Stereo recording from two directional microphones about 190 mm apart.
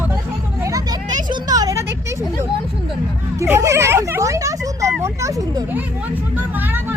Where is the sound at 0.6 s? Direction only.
20° right (ahead or behind).